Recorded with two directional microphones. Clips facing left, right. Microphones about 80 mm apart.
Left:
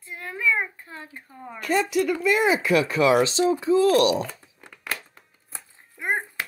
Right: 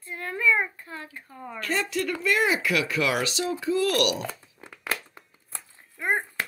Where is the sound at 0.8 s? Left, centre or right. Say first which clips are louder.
Right 1 dB; left.